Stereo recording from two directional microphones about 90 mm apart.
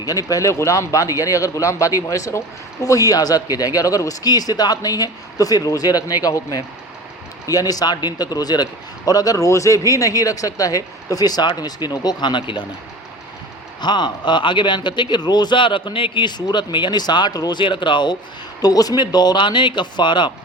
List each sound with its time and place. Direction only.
0.0 s a man's voice: 40° left (ahead or behind); by 12.6 s 60° left (ahead or behind)
13.8 s a man's voice: 55° left (ahead or behind)
17.6 s a man's voice: 65° left (ahead or behind)
18.6 s a man's voice: 45° left (ahead or behind)